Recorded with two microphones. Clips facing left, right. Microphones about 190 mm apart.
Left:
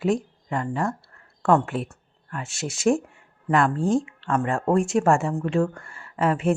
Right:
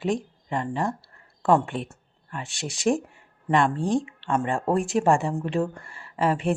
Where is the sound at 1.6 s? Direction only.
5° left (ahead or behind).